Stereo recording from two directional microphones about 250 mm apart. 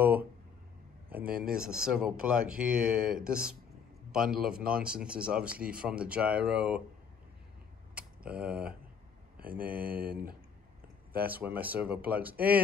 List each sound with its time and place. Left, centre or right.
0.0 s a sound: centre
1.4 s speech: centre
7.9 s tick: centre
9.4 s speech: right
11.2 s speech: centre